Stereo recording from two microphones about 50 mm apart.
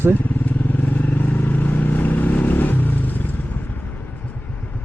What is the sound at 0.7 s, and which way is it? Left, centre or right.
Vehicle, left.